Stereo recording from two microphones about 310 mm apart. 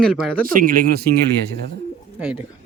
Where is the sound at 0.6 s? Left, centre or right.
Right.